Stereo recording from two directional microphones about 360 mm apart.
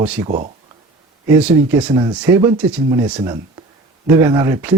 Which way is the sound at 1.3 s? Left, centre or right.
Centre.